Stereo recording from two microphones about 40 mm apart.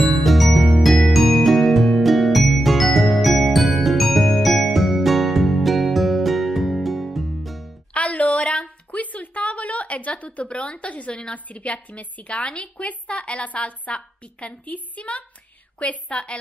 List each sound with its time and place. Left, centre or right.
0.0 s music: centre
7.9 s a sound: left
11.3 s speech: left